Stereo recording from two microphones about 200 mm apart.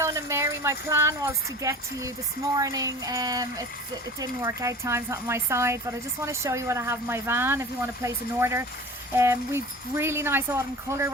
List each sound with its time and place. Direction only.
0.0 s speech: 15° right (ahead or behind)